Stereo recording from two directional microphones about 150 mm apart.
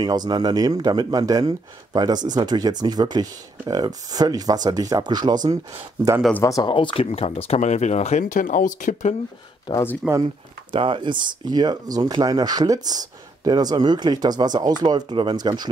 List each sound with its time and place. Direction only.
0.0 s speech: 25° right (ahead or behind)
6.3 s speech: 20° left (ahead or behind)
6.7 s speech: 35° left (ahead or behind); by 9.1 s 60° left (ahead or behind)
9.7 s speech: 20° left (ahead or behind)
10.7 s speech: 35° right (ahead or behind)